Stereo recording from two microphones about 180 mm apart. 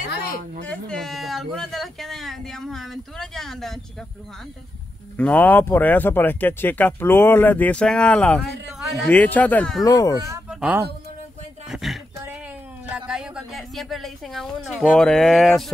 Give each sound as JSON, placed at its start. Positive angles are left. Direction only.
{"t": 0.7, "sound": "a sound", "side_deg": 5}
{"t": 5.1, "sound": "speech", "side_deg": 10}
{"t": 9.8, "sound": "speech", "side_deg": 20}
{"t": 10.5, "sound": "music", "side_deg": -5}
{"t": 11.7, "sound": "a sound", "side_deg": 0}
{"t": 12.9, "sound": "speech", "side_deg": -5}